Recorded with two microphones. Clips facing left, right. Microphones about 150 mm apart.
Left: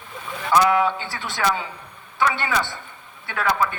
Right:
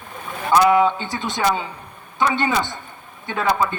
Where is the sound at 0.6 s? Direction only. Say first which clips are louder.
Right 4 dB; 20° right (ahead or behind).